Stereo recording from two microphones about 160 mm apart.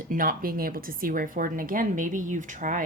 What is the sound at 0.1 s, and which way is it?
Speech, 60° right (ahead or behind).